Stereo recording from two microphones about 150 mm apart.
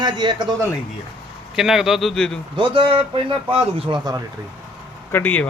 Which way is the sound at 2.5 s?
35° right (ahead or behind).